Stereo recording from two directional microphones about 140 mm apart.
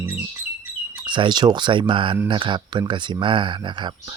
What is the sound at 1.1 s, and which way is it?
Speech, 35° right (ahead or behind).